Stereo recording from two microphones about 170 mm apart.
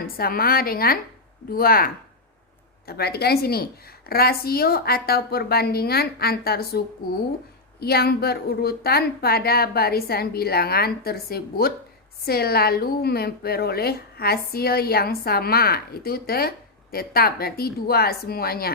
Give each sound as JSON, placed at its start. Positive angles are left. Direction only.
{"t": 0.0, "sound": "a woman's voice", "side_deg": 60}